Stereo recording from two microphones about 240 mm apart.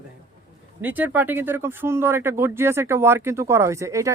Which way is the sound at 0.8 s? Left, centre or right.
Centre.